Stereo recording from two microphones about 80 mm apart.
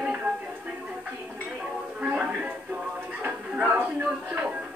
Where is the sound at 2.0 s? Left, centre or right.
Centre.